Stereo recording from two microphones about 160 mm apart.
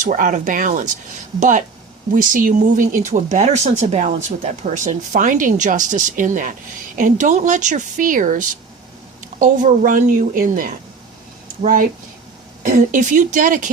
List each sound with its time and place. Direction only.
0.0 s a woman's voice: 55° right (ahead or behind)